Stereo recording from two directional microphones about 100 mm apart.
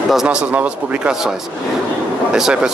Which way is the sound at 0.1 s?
5° right (ahead or behind).